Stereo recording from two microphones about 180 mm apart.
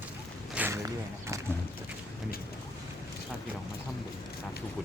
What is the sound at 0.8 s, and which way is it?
Speech, 15° right (ahead or behind).